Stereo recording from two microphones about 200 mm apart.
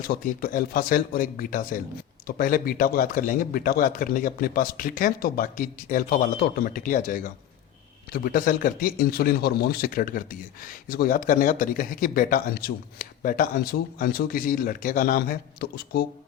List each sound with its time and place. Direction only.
0.1 s a man's voice: 45° left (ahead or behind)